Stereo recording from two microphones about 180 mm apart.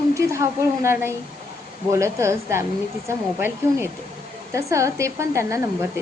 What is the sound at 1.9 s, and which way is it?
A woman's voice, 15° right (ahead or behind).